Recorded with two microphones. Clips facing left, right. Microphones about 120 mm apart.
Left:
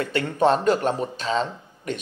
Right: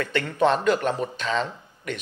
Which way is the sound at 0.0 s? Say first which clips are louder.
Left 1 dB; 30° left (ahead or behind).